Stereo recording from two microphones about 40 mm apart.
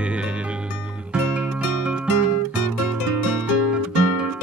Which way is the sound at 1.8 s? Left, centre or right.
Right.